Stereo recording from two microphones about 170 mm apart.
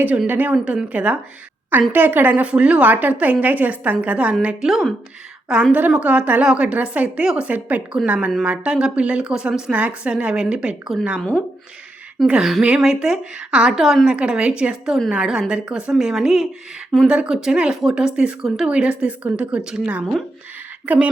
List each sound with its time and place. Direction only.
0.0 s a woman's voice: 10° right (ahead or behind)